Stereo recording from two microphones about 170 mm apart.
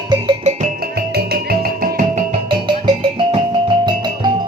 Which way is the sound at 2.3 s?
30° right (ahead or behind).